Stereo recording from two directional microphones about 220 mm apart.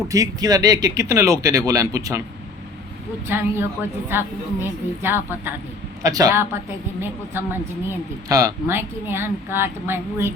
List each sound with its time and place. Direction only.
0.1 s speech: 15° right (ahead or behind)
3.2 s speech: 10° right (ahead or behind)